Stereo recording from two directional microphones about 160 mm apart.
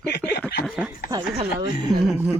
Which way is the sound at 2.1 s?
15° right (ahead or behind).